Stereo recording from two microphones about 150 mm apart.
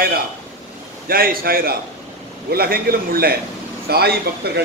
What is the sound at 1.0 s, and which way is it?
A man's voice, 85° right.